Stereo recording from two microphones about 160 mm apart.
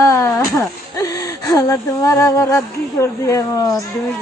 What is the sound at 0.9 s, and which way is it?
Speech, 20° left (ahead or behind).